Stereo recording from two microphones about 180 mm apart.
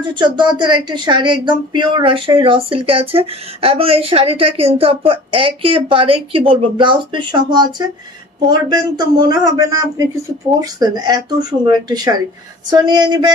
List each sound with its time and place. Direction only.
0.1 s speech: 25° right (ahead or behind)